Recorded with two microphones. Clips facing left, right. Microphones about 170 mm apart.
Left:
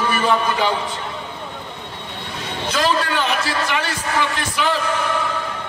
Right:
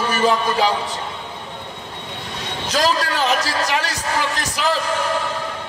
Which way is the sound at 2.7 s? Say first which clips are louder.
Even; 40° right (ahead or behind).